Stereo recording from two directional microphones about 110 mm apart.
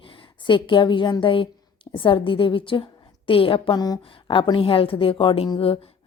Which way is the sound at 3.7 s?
35° left (ahead or behind).